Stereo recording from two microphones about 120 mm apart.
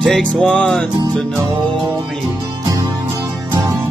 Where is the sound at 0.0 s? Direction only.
5° left (ahead or behind).